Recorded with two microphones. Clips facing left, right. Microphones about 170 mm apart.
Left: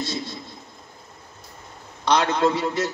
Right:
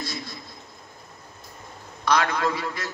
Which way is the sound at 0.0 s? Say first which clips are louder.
Left 5 dB; 25° left (ahead or behind).